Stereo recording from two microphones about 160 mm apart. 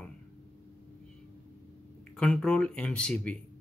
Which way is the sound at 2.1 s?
5° left (ahead or behind).